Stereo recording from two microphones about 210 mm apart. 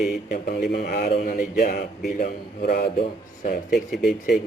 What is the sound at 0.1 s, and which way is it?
A man's voice, 40° left (ahead or behind).